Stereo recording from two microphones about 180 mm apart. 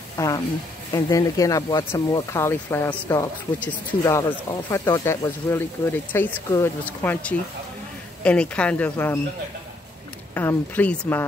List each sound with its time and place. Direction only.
0.2 s speech: 15° left (ahead or behind)
10.3 s speech: 10° left (ahead or behind)